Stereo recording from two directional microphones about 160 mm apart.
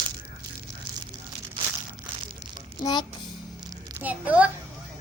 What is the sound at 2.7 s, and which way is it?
Speech, 25° left (ahead or behind).